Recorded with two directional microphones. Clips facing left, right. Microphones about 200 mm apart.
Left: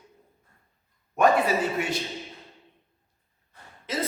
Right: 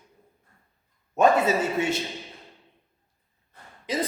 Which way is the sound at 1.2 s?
25° right (ahead or behind).